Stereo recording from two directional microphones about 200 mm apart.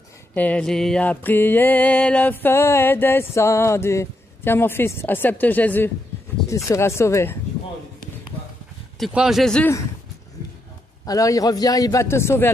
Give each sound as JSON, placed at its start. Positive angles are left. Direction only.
{"t": 0.3, "sound": "mantra", "side_deg": 5}
{"t": 9.0, "sound": "speech", "side_deg": 0}
{"t": 11.1, "sound": "mantra", "side_deg": 15}